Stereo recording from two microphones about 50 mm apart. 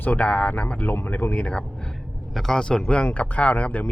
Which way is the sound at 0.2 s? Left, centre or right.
Left.